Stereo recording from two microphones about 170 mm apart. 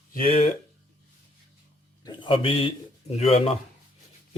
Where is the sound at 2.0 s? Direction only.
30° left (ahead or behind).